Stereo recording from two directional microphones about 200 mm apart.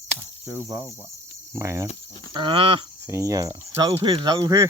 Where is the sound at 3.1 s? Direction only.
15° right (ahead or behind).